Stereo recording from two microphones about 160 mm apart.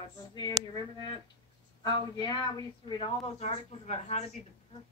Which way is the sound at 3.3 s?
45° left (ahead or behind).